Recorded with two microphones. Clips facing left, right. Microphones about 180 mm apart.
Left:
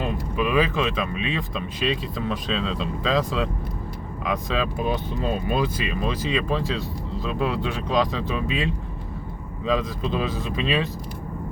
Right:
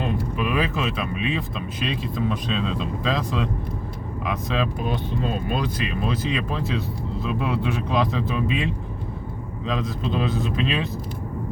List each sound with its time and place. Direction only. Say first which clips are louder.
0.0 s speech: even; centre (ahead or behind)